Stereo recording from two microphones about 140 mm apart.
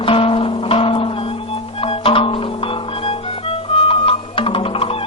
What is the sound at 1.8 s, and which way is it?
Music, 40° left (ahead or behind).